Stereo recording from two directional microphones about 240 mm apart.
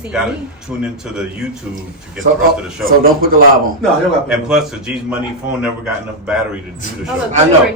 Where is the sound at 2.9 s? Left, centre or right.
Right.